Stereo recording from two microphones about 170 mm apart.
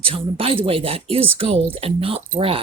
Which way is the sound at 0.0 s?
35° right (ahead or behind).